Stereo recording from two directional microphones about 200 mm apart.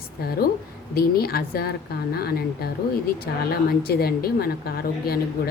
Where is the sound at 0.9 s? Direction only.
50° left (ahead or behind).